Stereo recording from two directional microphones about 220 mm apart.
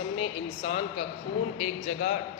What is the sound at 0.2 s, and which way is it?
A woman's voice, 25° left (ahead or behind).